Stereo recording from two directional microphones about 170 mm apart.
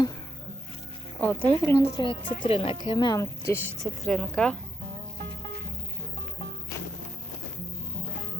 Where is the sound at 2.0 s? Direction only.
30° left (ahead or behind); by 3.7 s 15° left (ahead or behind).